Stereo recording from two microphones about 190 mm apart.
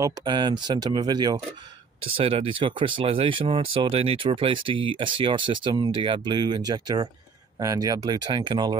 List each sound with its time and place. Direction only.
0.0 s speech: 25° right (ahead or behind)